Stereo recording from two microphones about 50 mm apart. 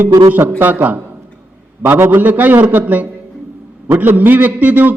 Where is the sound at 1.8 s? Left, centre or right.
Right.